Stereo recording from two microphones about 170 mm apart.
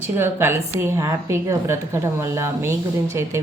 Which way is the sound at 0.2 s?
15° right (ahead or behind).